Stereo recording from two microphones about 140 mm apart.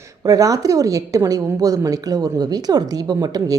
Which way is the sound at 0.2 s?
25° right (ahead or behind).